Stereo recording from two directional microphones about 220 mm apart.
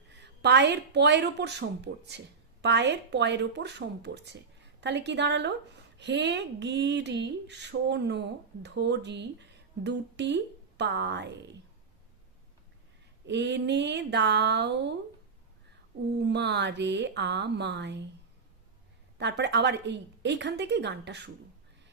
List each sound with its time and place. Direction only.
0.1 s a woman's voice: 50° right (ahead or behind)
13.2 s a woman's voice: 55° right (ahead or behind)
16.2 s a woman's voice: 50° right (ahead or behind)
19.2 s a woman's voice: 50° right (ahead or behind)